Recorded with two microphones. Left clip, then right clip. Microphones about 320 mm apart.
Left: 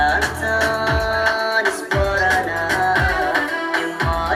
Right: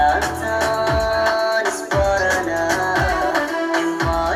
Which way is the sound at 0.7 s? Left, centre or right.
Right.